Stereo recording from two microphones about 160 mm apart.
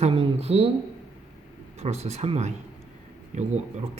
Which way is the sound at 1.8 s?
40° right (ahead or behind).